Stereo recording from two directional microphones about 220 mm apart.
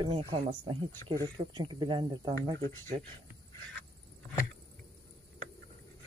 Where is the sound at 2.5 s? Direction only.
10° left (ahead or behind).